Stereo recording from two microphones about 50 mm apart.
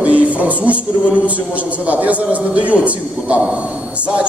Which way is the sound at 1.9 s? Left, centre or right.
Right.